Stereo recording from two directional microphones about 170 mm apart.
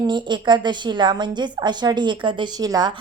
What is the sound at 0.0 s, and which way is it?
A woman's voice, 25° right (ahead or behind).